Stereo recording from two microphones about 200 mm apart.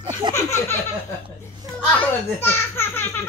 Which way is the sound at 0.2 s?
20° right (ahead or behind).